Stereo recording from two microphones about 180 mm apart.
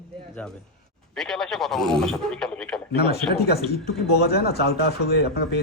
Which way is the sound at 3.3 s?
60° left (ahead or behind).